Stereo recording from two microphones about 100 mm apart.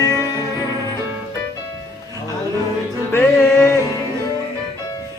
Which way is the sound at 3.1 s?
20° left (ahead or behind).